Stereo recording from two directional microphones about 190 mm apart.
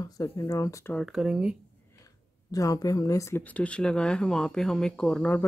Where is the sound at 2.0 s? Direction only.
20° left (ahead or behind).